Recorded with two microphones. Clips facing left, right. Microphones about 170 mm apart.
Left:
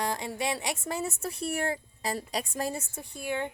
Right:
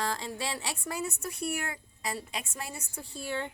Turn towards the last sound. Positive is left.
turn(degrees=15)  # may be behind; listen again after turning